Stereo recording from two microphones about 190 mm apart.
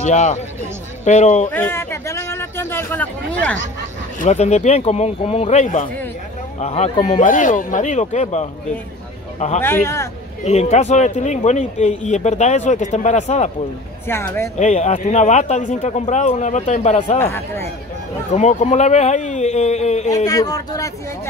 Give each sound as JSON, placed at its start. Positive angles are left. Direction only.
{"t": 0.0, "sound": "a man's voice", "side_deg": 35}
{"t": 1.5, "sound": "speech", "side_deg": 10}
{"t": 4.2, "sound": "a man's voice", "side_deg": 35}
{"t": 9.6, "sound": "speech", "side_deg": 10}
{"t": 10.4, "sound": "a man's voice", "side_deg": 35}
{"t": 14.0, "sound": "speech", "side_deg": 10}
{"t": 14.6, "sound": "a man's voice", "side_deg": 35}
{"t": 17.2, "sound": "speech", "side_deg": 10}
{"t": 18.3, "sound": "a man's voice", "side_deg": 35}
{"t": 20.2, "sound": "speech", "side_deg": 20}